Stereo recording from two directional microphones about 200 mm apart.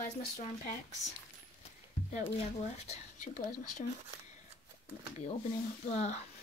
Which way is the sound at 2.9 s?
40° left (ahead or behind).